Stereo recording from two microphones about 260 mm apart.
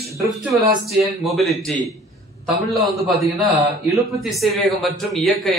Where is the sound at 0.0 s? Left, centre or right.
Centre.